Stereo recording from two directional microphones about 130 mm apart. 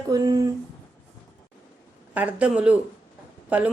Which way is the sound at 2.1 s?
10° right (ahead or behind).